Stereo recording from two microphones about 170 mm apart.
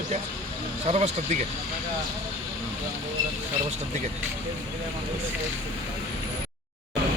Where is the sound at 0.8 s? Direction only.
40° right (ahead or behind).